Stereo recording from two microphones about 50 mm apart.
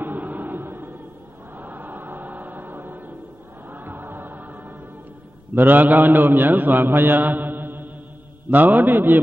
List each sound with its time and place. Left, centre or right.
0.0 s music: right
1.6 s choir: right
3.7 s music: right
5.5 s mantra: right
8.5 s a man's voice: right